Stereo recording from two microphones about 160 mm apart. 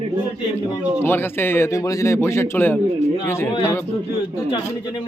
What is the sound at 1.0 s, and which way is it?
A man's voice, 15° left (ahead or behind).